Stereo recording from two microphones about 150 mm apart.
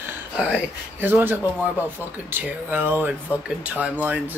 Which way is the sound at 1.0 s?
15° right (ahead or behind).